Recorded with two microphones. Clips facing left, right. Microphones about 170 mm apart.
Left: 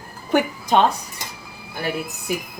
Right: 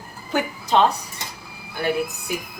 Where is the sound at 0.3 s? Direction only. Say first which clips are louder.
Left 5 dB; 60° left (ahead or behind).